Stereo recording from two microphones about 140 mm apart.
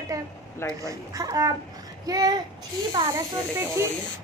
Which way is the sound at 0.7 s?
25° right (ahead or behind).